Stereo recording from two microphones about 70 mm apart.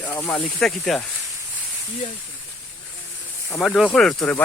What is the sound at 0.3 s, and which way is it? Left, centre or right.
Speech, centre.